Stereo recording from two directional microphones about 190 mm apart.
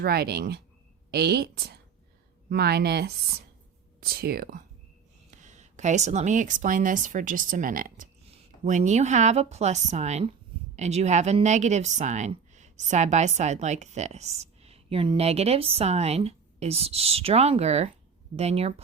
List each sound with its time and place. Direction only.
0.0 s a woman's voice: 55° right (ahead or behind)
5.3 s speech: 40° right (ahead or behind)